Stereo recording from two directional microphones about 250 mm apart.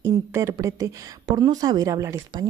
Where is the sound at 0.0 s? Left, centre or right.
Centre.